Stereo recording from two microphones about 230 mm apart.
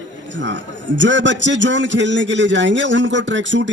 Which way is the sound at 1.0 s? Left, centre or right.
Right.